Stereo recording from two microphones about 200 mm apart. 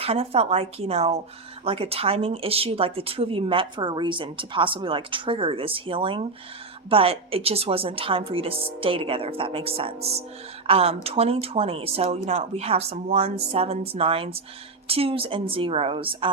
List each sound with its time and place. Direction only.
0.0 s speech: 30° right (ahead or behind)